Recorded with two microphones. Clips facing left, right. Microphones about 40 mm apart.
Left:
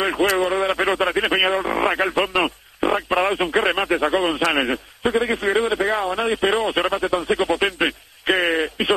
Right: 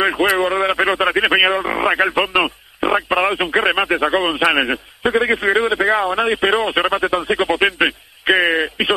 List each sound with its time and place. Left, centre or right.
0.0 s speech: centre
7.2 s radio: centre